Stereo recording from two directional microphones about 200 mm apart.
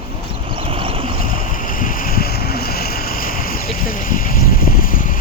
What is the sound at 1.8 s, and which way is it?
Vehicle, 45° left (ahead or behind).